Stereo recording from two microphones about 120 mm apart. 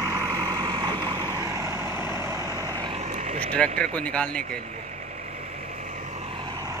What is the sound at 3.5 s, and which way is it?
Speech, 10° left (ahead or behind).